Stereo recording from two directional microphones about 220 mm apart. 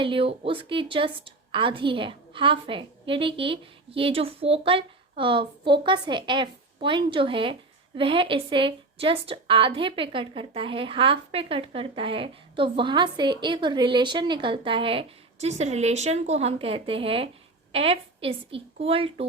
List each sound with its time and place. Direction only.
0.0 s a woman's voice: 25° right (ahead or behind)